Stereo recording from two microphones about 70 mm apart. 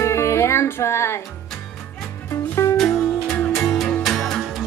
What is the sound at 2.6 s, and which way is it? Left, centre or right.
Music, left.